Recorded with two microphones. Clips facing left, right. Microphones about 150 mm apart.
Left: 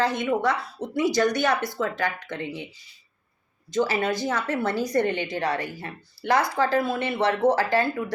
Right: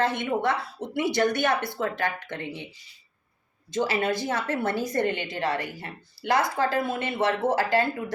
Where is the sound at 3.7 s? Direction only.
25° right (ahead or behind).